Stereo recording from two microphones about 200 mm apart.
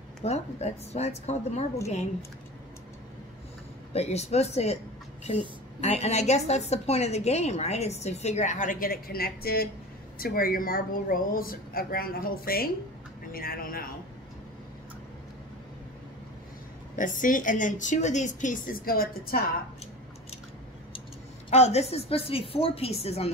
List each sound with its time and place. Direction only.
0.2 s a woman's voice: 30° left (ahead or behind)
3.9 s a woman's voice: 30° left (ahead or behind)
5.8 s a woman's voice: 35° left (ahead or behind)
16.9 s a woman's voice: 40° left (ahead or behind)
21.5 s a woman's voice: 30° left (ahead or behind)